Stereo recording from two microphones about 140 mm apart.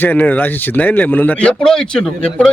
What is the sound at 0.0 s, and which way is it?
A man's voice, 15° left (ahead or behind).